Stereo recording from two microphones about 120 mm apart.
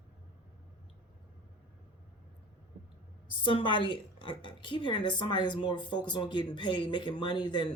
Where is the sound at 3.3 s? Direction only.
45° left (ahead or behind).